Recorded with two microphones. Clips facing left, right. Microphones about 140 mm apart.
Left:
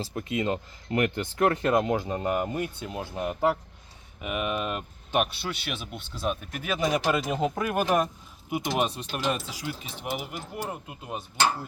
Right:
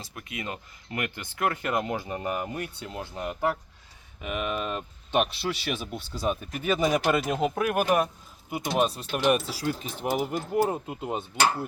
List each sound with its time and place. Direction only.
0.0 s speech: 30° left (ahead or behind); by 8.1 s 10° right (ahead or behind)
8.4 s speech: centre (ahead or behind)
9.8 s speech: 45° right (ahead or behind)
10.8 s speech: 25° right (ahead or behind)